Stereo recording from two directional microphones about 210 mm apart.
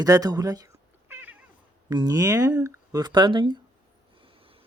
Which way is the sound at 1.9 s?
15° right (ahead or behind).